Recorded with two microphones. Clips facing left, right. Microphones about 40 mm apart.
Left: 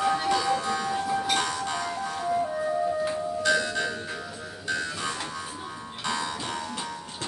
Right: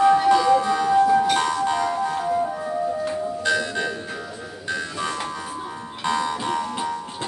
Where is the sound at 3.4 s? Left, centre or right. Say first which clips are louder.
Right 1 dB; centre.